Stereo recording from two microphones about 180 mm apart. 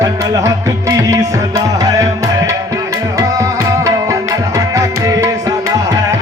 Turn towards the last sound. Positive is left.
turn(degrees=-20)  # may be behind; listen again after turning